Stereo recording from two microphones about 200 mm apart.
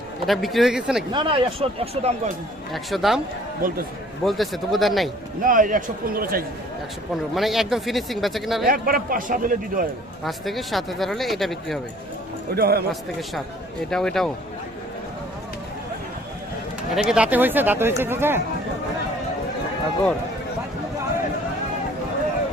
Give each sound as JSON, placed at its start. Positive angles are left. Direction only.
{"t": 0.3, "sound": "speech", "side_deg": 0}
{"t": 1.1, "sound": "speech", "side_deg": -25}
{"t": 2.7, "sound": "speech", "side_deg": 0}
{"t": 3.6, "sound": "a man's voice", "side_deg": -45}
{"t": 4.3, "sound": "speech", "side_deg": 0}
{"t": 5.4, "sound": "a man's voice", "side_deg": -45}
{"t": 7.3, "sound": "speech", "side_deg": 0}
{"t": 8.6, "sound": "a man's voice", "side_deg": -45}
{"t": 10.2, "sound": "speech", "side_deg": 0}
{"t": 12.5, "sound": "a man's voice", "side_deg": -50}
{"t": 13.9, "sound": "speech", "side_deg": 5}
{"t": 16.9, "sound": "speech", "side_deg": -5}